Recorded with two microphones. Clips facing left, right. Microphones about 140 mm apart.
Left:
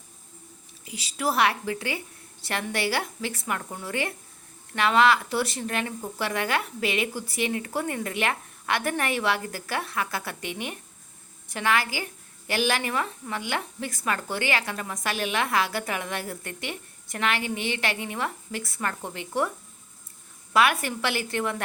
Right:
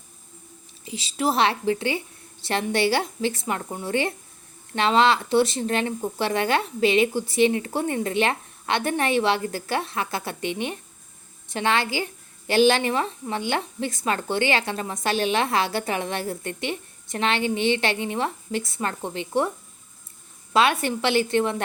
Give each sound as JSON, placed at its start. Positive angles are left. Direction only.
{"t": 0.9, "sound": "a woman's voice", "side_deg": -25}
{"t": 20.5, "sound": "a woman's voice", "side_deg": -25}